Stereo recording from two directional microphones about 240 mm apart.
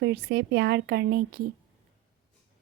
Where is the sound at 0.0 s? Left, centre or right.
Right.